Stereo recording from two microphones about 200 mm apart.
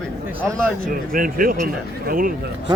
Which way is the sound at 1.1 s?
45° right (ahead or behind).